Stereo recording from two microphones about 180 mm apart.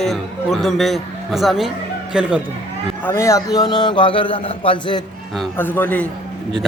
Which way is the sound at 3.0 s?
15° left (ahead or behind).